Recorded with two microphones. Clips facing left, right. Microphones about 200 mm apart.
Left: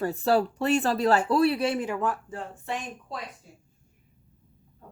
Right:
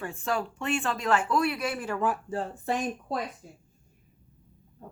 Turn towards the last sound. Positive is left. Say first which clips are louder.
# right 5 dB
turn(degrees=-40)  # may be behind; listen again after turning